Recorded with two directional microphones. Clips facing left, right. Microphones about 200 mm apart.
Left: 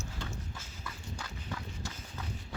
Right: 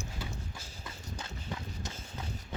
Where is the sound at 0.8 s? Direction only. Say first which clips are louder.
Even; 20° right (ahead or behind).